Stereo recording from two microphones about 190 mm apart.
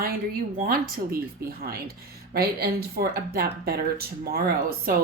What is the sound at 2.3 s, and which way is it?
Speech, 55° right (ahead or behind).